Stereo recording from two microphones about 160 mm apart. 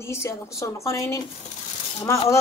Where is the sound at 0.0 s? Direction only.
15° left (ahead or behind).